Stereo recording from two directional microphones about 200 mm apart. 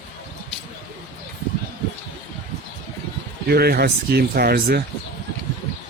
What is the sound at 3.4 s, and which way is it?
Speech, 50° right (ahead or behind).